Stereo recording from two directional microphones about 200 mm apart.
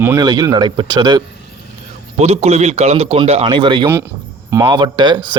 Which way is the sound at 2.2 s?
30° right (ahead or behind).